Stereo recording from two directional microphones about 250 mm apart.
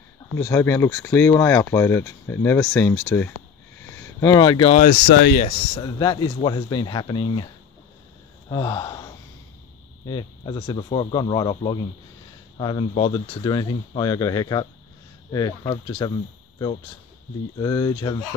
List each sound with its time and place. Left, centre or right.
0.4 s speech: centre; by 5.5 s left
5.8 s speech: centre
8.5 s speech: centre
17.6 s speech: centre